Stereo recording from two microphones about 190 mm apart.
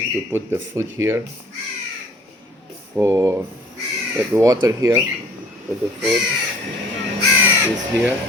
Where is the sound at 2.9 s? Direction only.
15° right (ahead or behind).